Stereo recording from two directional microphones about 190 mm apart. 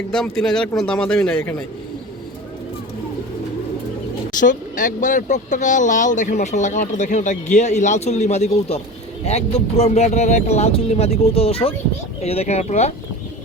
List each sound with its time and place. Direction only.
0.1 s speech: 5° left (ahead or behind)
4.4 s speech: 45° left (ahead or behind)